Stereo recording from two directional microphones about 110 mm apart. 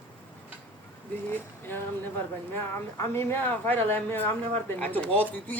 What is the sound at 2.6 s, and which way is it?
Speech, 20° left (ahead or behind).